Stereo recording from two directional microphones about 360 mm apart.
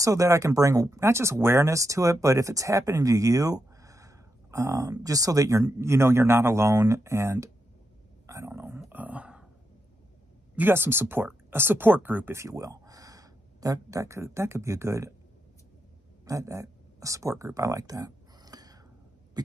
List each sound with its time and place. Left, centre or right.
0.0 s speech: centre
8.3 s a sound: centre
10.5 s speech: centre
16.3 s speech: centre
19.4 s rodents: centre